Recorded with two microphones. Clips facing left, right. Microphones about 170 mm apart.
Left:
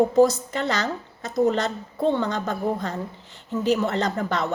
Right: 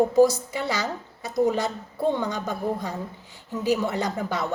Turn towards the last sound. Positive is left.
turn(degrees=-10)  # may be behind; listen again after turning